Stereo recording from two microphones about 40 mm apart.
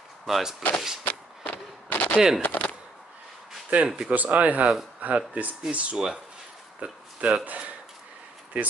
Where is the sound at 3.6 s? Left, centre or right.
Right.